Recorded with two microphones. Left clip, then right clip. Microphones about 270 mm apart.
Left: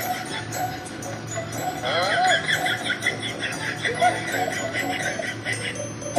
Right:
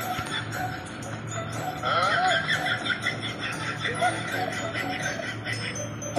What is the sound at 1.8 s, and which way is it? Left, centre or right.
Music, left.